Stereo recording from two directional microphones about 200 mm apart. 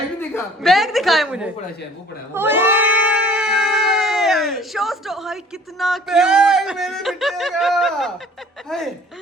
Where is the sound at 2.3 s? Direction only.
10° right (ahead or behind).